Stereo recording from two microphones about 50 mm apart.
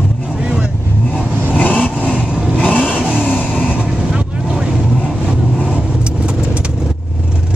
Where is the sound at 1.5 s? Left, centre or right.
Left.